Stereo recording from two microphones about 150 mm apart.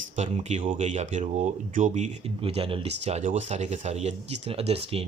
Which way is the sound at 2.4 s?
40° right (ahead or behind).